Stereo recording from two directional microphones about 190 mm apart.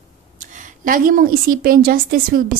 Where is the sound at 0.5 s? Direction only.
45° right (ahead or behind).